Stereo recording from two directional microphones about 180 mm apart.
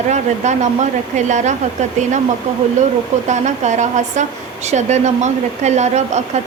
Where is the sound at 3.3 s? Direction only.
40° right (ahead or behind).